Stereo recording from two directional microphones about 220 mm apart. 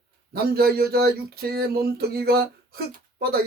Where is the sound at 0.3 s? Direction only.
45° right (ahead or behind).